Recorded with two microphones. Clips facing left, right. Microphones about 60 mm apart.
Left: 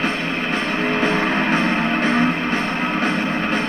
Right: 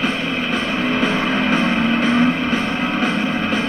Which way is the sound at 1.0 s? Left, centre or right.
Left.